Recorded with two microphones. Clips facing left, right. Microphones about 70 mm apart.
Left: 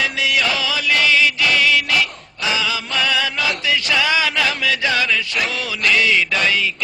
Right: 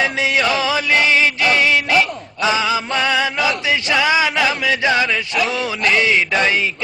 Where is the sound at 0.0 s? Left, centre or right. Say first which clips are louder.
Right 2 dB; right.